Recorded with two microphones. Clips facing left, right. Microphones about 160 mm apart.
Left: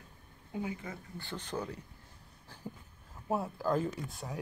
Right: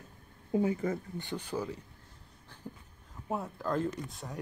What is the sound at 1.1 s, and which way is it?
Speech, 15° right (ahead or behind).